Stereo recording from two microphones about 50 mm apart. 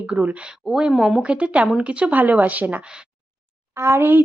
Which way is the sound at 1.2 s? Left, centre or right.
Right.